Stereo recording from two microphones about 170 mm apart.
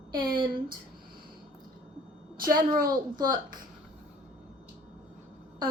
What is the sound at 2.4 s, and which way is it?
A woman's voice, 55° right (ahead or behind).